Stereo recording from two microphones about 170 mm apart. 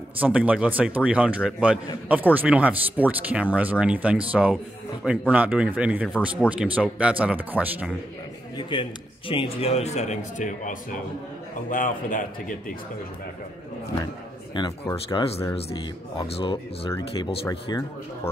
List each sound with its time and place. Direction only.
0.2 s speech: 10° right (ahead or behind)
8.5 s a man's voice: 30° left (ahead or behind); by 12.7 s 50° left (ahead or behind)
14.5 s speech: 25° left (ahead or behind)
16.3 s speech: 35° left (ahead or behind)
17.5 s speech: 20° left (ahead or behind)